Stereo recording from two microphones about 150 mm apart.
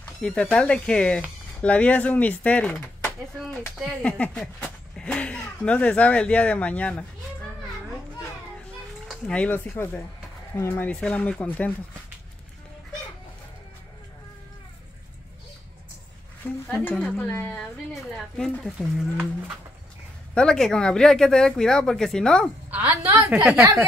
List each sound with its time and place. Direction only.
0.0 s speech: 5° left (ahead or behind)
9.0 s speech: 5° left (ahead or behind)
16.6 s speech: 5° left (ahead or behind)
22.7 s a woman's voice: 10° right (ahead or behind)